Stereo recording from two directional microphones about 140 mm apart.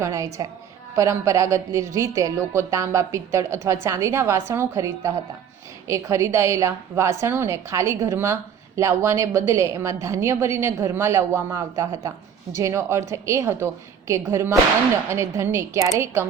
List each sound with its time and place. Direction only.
0.0 s a woman's voice: 20° right (ahead or behind)